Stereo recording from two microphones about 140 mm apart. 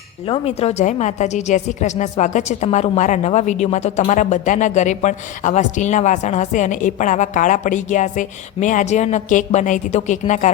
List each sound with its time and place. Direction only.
0.3 s a woman's voice: 45° left (ahead or behind)